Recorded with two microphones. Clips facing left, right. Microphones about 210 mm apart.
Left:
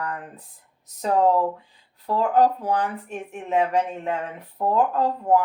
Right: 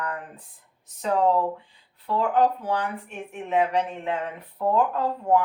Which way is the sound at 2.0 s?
40° left (ahead or behind).